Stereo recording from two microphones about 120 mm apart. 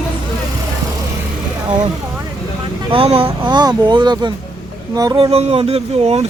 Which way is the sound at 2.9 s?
50° right (ahead or behind).